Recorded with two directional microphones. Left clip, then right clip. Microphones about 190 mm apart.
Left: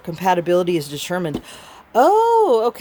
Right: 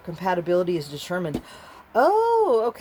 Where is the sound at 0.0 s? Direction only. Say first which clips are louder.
Left 7 dB; 40° left (ahead or behind).